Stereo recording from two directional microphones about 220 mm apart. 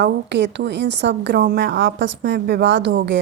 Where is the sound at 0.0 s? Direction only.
50° right (ahead or behind).